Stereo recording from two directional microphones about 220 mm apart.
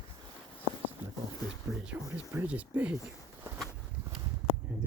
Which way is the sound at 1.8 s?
10° right (ahead or behind).